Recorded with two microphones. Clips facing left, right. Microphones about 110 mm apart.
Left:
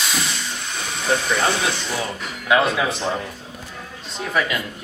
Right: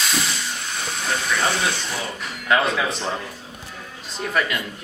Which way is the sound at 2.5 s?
10° left (ahead or behind).